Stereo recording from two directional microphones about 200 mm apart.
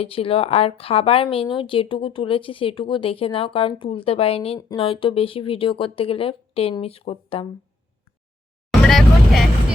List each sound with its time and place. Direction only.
0.0 s a woman's voice: 30° left (ahead or behind)
8.9 s vehicle: centre (ahead or behind)